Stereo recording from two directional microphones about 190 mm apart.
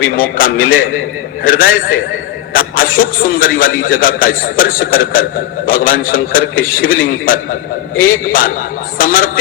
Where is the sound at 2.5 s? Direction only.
45° left (ahead or behind).